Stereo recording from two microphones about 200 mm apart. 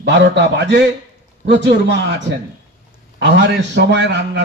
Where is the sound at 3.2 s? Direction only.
60° right (ahead or behind).